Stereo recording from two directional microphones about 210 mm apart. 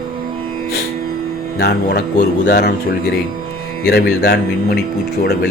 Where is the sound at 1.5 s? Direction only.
50° left (ahead or behind).